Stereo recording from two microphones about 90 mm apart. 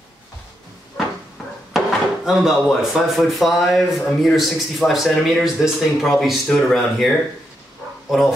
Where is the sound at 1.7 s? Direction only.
5° right (ahead or behind).